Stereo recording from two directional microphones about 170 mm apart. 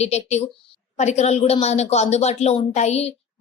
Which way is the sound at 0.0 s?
40° left (ahead or behind).